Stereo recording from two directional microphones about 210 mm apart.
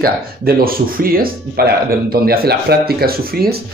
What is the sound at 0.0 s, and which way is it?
Speech, 45° right (ahead or behind).